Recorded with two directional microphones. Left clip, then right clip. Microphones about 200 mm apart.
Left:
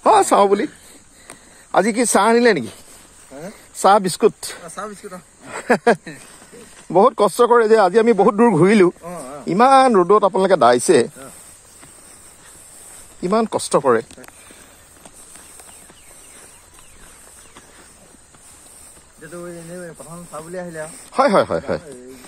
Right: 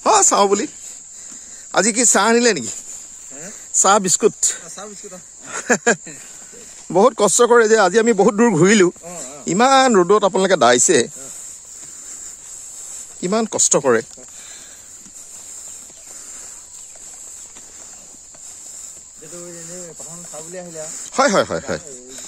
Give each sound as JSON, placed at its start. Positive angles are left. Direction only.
{"t": 0.0, "sound": "a sound", "side_deg": -25}
{"t": 1.7, "sound": "speech", "side_deg": -25}
{"t": 3.8, "sound": "speech", "side_deg": -30}
{"t": 4.7, "sound": "speech", "side_deg": 0}
{"t": 5.4, "sound": "speech", "side_deg": -35}
{"t": 9.0, "sound": "speech", "side_deg": 0}
{"t": 9.5, "sound": "speech", "side_deg": -40}
{"t": 13.2, "sound": "speech", "side_deg": -35}
{"t": 20.3, "sound": "speech", "side_deg": 0}
{"t": 21.1, "sound": "speech", "side_deg": -35}